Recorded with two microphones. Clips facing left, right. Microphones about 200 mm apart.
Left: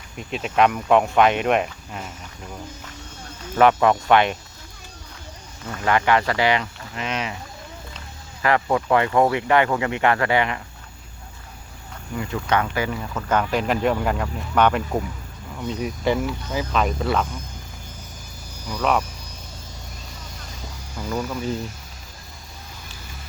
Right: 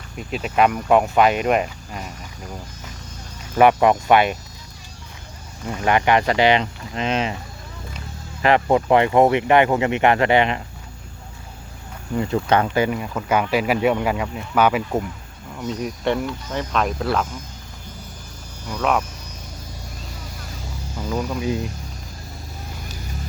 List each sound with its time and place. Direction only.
0.2 s speech: centre (ahead or behind)
3.6 s speech: 15° right (ahead or behind)
5.6 s speech: 15° right (ahead or behind)
8.4 s speech: 20° right (ahead or behind)
12.1 s speech: 30° right (ahead or behind)
12.9 s speech: 10° right (ahead or behind)
18.7 s speech: centre (ahead or behind)
21.1 s speech: 10° right (ahead or behind)